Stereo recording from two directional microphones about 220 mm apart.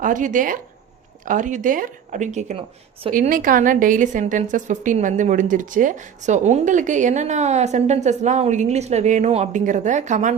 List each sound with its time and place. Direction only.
0.0 s a woman's voice: 35° right (ahead or behind)
3.1 s a woman's voice: 40° right (ahead or behind)